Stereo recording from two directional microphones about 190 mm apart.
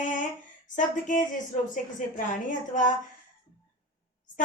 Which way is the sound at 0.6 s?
45° left (ahead or behind).